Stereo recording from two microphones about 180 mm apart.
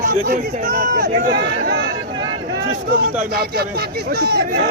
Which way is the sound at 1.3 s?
70° right (ahead or behind).